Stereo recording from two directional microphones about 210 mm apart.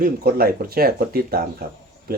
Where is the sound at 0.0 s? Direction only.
45° right (ahead or behind).